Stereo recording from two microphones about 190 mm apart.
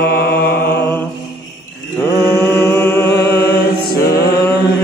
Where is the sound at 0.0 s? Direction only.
55° left (ahead or behind).